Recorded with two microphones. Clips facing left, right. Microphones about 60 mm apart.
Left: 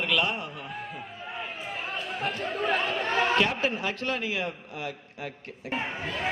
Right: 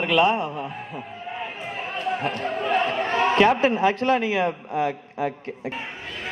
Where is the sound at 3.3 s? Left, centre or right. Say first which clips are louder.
Right 8 dB; right.